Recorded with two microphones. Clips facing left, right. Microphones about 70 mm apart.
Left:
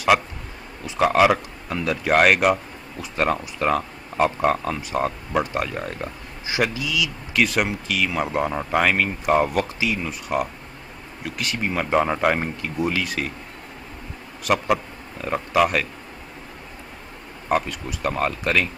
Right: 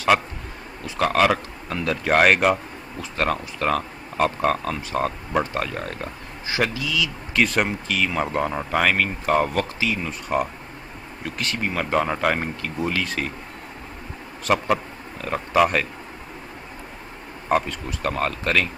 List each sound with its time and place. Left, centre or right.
0.8 s speech: centre
5.4 s speech: centre
5.7 s speech: centre
6.4 s speech: centre
7.3 s speech: centre
14.4 s speech: centre
17.5 s speech: centre